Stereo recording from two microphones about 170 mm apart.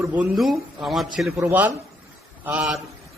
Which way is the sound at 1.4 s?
15° right (ahead or behind).